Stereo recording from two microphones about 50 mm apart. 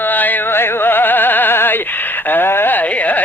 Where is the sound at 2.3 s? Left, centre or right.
Left.